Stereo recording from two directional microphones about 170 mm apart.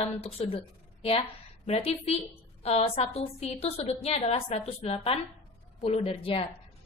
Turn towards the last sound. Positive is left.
turn(degrees=35)  # may be behind; listen again after turning